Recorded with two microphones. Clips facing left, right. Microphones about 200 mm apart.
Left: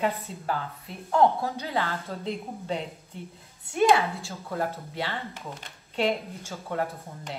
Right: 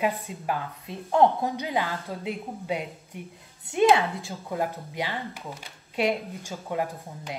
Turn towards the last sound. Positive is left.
turn(degrees=-15)  # may be behind; listen again after turning